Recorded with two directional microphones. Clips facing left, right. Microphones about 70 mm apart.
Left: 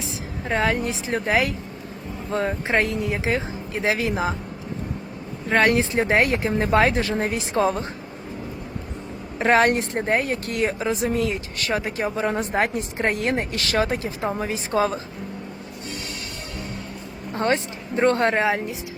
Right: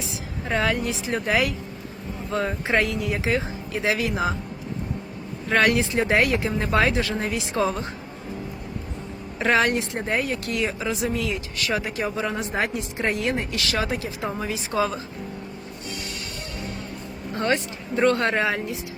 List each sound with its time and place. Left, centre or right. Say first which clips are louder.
0.0 s speech: left 1 dB; left
5.5 s speech: left 1 dB; left
9.4 s speech: left 3 dB; left
17.3 s speech: left 2 dB; left